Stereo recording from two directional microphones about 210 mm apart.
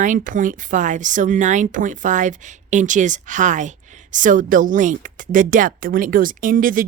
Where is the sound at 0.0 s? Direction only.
40° right (ahead or behind).